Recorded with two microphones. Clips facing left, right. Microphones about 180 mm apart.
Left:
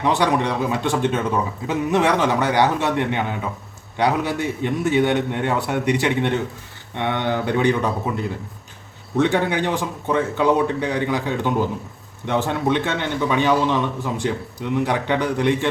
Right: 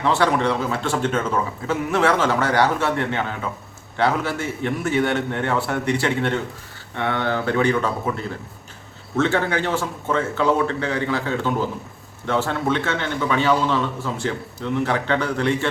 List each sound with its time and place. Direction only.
0.0 s a man's voice: 15° left (ahead or behind)